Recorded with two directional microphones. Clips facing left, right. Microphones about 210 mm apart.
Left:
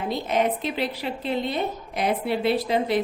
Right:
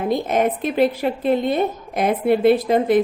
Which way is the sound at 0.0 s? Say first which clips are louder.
Right 5 dB; 50° right (ahead or behind).